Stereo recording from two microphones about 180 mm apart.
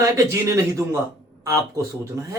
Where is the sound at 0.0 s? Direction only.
15° right (ahead or behind).